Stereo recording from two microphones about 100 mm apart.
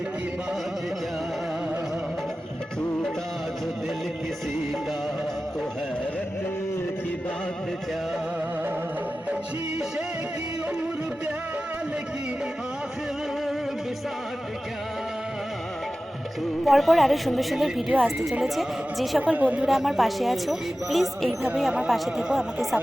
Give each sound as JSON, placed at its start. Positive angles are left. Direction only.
{"t": 16.6, "sound": "speech", "side_deg": 0}
{"t": 19.2, "sound": "speech", "side_deg": -15}
{"t": 19.6, "sound": "speech", "side_deg": -5}